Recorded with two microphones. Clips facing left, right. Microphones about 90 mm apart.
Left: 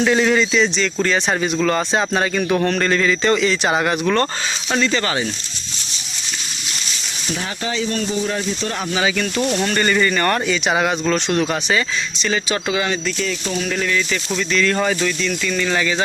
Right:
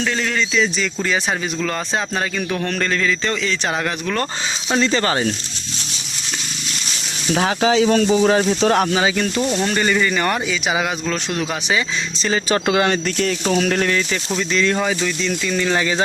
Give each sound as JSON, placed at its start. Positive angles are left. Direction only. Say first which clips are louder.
{"t": 0.0, "sound": "speech", "louder": "left 6 dB", "side_deg": 15}
{"t": 0.5, "sound": "a man's voice", "louder": "left 2 dB", "side_deg": 0}
{"t": 4.7, "sound": "speech", "louder": "right 2 dB", "side_deg": -30}
{"t": 7.3, "sound": "speech", "louder": "right 9 dB", "side_deg": -90}
{"t": 9.0, "sound": "speech", "louder": "right 1 dB", "side_deg": -25}
{"t": 9.7, "sound": "a man's voice", "louder": "left 2 dB", "side_deg": -5}
{"t": 12.2, "sound": "speech", "louder": "right 3 dB", "side_deg": -35}
{"t": 14.3, "sound": "speech", "louder": "even", "side_deg": -25}
{"t": 14.8, "sound": "a man's voice", "louder": "left 1 dB", "side_deg": -5}
{"t": 15.2, "sound": "speech", "louder": "even", "side_deg": -25}